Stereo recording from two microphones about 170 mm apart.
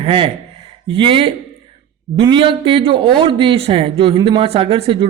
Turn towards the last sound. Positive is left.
turn(degrees=-30)  # may be behind; listen again after turning